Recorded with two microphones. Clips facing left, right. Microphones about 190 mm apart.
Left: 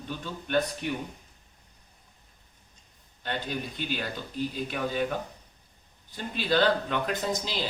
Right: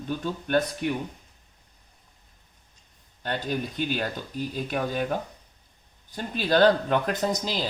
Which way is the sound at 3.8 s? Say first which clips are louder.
Right 8 dB; 45° right (ahead or behind).